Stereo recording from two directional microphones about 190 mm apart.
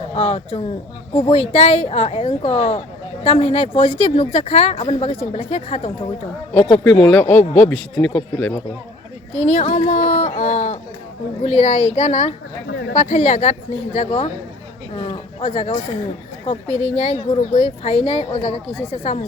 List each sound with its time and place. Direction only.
0.1 s a woman's voice: 30° left (ahead or behind)
6.6 s speech: 5° left (ahead or behind)
9.3 s a woman's voice: 35° left (ahead or behind)